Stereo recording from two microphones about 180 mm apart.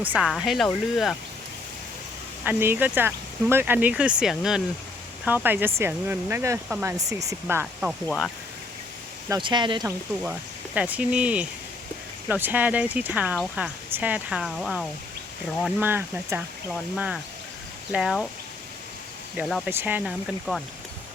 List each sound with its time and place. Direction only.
0.0 s speech: 5° right (ahead or behind)
2.4 s speech: 10° right (ahead or behind)
8.0 s speech: 5° left (ahead or behind)
9.3 s speech: 25° right (ahead or behind)
10.8 s speech: 10° right (ahead or behind)
15.8 s speech: 10° right (ahead or behind)
19.4 s speech: centre (ahead or behind)